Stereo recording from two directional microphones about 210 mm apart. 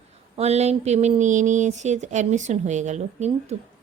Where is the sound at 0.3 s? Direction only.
30° right (ahead or behind).